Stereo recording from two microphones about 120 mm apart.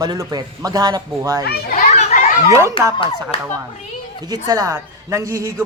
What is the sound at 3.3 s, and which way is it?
Speech, 50° left (ahead or behind).